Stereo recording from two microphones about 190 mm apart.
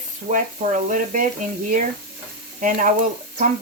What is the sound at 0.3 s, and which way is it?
Speech, 40° right (ahead or behind).